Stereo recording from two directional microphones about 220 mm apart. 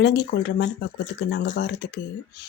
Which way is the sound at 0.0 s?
50° left (ahead or behind).